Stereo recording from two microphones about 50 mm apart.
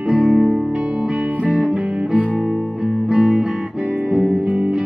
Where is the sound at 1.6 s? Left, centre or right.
Right.